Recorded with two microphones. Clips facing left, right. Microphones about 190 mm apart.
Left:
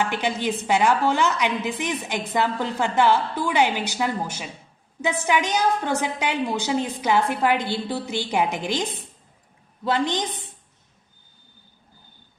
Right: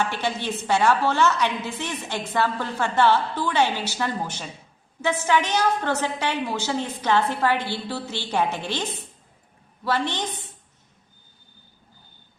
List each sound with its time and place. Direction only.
0.0 s a woman's voice: 15° left (ahead or behind)